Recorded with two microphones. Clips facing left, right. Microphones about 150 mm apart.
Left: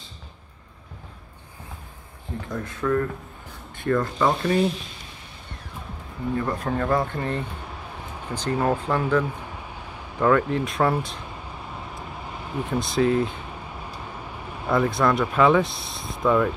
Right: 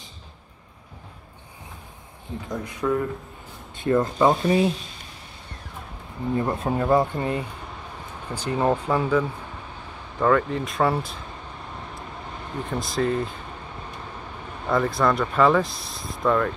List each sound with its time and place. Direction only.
2.4 s speech: 20° right (ahead or behind)
6.3 s speech: 25° right (ahead or behind)
10.1 s speech: centre (ahead or behind)
12.5 s speech: centre (ahead or behind)
14.7 s speech: centre (ahead or behind)